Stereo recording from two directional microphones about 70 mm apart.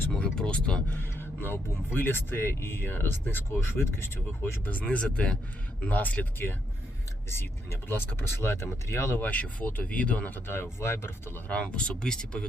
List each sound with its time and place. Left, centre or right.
0.1 s speech: centre
0.9 s speech: left
4.6 s speech: left
7.3 s speech: left
9.2 s speech: left
11.4 s speech: centre